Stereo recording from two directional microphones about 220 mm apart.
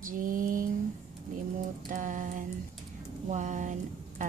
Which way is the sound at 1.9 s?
35° right (ahead or behind).